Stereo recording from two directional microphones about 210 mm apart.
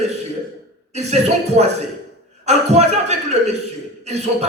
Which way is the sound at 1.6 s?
30° right (ahead or behind).